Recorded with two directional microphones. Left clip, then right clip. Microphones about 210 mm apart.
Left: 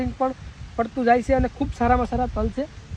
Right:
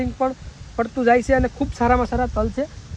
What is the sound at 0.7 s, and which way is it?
Speech, centre (ahead or behind).